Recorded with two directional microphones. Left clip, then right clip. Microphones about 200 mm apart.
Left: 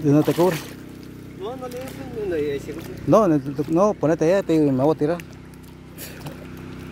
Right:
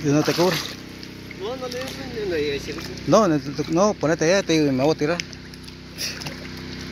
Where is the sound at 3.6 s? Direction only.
30° left (ahead or behind).